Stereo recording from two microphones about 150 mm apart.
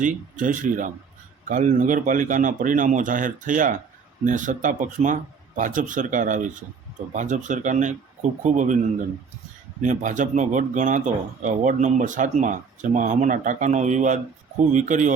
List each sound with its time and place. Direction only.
0.0 s speech: 60° right (ahead or behind)